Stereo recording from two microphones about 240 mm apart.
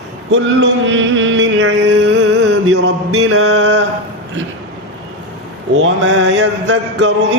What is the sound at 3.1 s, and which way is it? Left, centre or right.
Mantra, right.